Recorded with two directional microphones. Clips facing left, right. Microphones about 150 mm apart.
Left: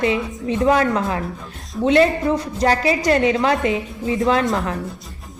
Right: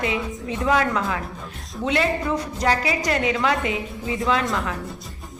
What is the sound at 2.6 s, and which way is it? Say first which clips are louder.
A woman's voice: left 5 dB; 35° left (ahead or behind).